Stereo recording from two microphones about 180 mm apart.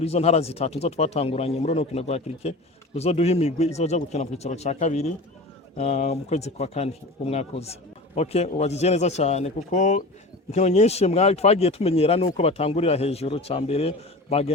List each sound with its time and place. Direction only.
0.0 s speech: 35° left (ahead or behind)